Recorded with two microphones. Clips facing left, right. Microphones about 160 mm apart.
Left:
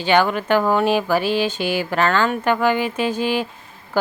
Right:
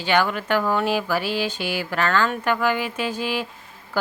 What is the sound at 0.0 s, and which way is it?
Speech, 25° left (ahead or behind).